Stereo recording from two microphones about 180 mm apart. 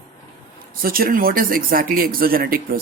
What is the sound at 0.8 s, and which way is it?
Speech, 50° right (ahead or behind).